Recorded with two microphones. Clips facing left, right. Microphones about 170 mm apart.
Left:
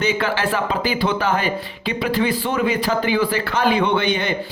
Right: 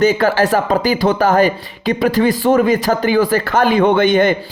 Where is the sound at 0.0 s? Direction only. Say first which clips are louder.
Right 8 dB; 40° right (ahead or behind).